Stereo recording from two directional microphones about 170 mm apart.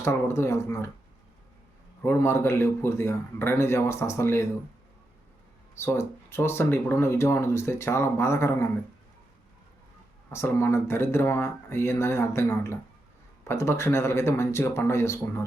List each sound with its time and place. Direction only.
0.0 s speech: 15° left (ahead or behind)
2.0 s speech: 15° left (ahead or behind)
5.7 s speech: 15° left (ahead or behind)
10.2 s speech: 15° left (ahead or behind)